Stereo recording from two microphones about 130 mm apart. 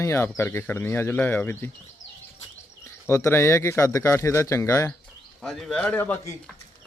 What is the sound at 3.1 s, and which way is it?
Speech, 20° left (ahead or behind).